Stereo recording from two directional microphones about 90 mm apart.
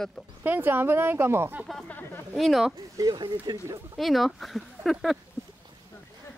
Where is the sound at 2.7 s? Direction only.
45° right (ahead or behind).